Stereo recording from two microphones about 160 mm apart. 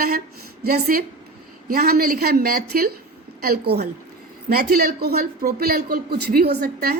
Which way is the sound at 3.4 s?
80° right.